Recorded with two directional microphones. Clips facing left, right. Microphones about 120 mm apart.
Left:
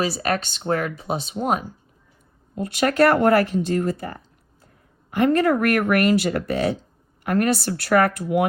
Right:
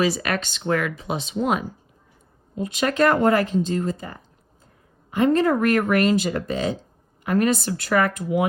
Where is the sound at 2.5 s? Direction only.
55° left (ahead or behind).